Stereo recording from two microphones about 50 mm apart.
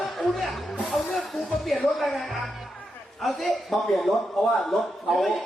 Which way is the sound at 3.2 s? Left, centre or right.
Centre.